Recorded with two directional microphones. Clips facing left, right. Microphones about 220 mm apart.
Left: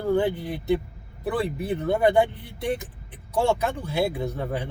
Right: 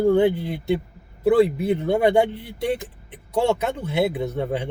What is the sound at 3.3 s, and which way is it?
Speech, 20° right (ahead or behind).